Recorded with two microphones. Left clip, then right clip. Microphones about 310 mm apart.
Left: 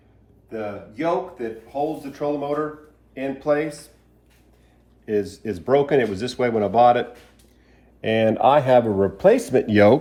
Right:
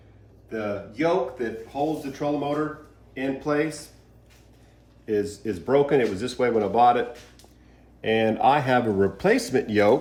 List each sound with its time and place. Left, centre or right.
0.5 s speech: centre
5.0 s speech: centre
8.0 s speech: left